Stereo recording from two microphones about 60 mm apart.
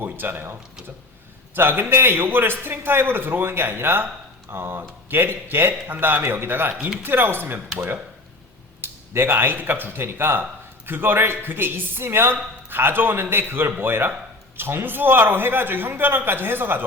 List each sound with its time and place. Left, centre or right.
0.0 s a man's voice: right
1.5 s a man's voice: right
8.8 s a man's voice: right